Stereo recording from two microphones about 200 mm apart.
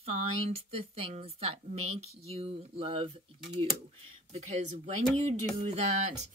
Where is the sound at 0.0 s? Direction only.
30° right (ahead or behind).